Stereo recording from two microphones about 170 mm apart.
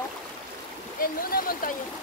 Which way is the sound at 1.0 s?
55° left (ahead or behind).